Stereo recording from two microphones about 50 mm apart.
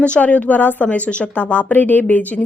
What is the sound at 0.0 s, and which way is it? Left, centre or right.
A woman's voice, left.